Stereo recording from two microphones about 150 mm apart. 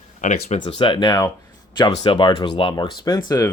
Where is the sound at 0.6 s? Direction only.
35° left (ahead or behind).